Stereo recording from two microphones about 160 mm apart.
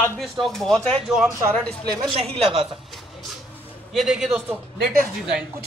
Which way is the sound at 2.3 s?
35° right (ahead or behind).